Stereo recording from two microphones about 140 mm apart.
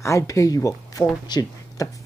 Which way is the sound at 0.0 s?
20° left (ahead or behind).